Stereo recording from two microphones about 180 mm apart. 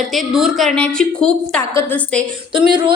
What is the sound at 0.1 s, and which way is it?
A woman's voice, centre (ahead or behind).